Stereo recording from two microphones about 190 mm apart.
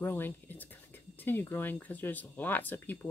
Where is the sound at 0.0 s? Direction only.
10° left (ahead or behind).